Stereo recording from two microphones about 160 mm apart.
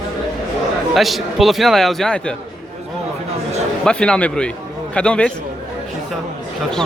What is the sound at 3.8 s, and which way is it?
A man's voice, 5° left (ahead or behind).